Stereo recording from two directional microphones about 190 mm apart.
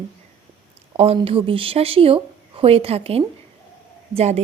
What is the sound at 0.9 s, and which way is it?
A woman's voice, 30° right (ahead or behind).